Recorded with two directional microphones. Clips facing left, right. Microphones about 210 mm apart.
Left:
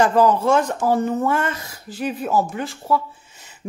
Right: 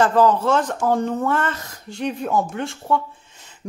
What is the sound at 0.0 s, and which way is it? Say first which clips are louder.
Speech: even; 10° left (ahead or behind).